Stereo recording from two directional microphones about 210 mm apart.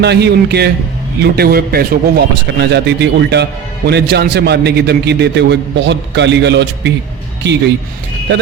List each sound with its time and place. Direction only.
0.0 s a man's voice: 50° right (ahead or behind)